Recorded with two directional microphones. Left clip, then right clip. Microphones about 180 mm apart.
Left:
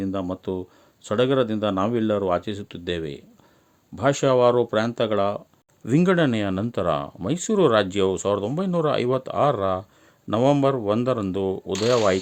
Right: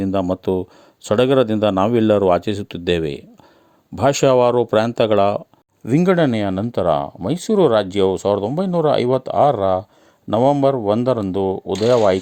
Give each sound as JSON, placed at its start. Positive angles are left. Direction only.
{"t": 0.0, "sound": "speech", "side_deg": -35}
{"t": 5.8, "sound": "speech", "side_deg": -10}